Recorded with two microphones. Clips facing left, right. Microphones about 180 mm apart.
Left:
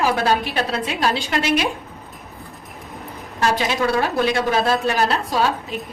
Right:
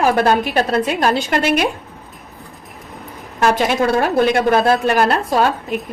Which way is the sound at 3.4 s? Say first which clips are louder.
Right 4 dB; 55° right (ahead or behind).